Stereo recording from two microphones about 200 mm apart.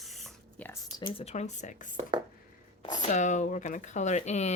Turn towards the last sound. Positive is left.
turn(degrees=35)  # may be behind; listen again after turning